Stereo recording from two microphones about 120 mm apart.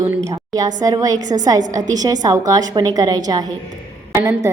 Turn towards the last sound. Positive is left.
turn(degrees=-25)  # may be behind; listen again after turning